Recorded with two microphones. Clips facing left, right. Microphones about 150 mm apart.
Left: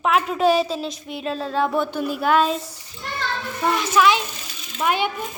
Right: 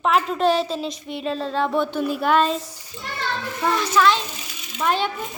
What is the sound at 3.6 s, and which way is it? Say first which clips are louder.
A child's voice: left 1 dB; 15° left (ahead or behind).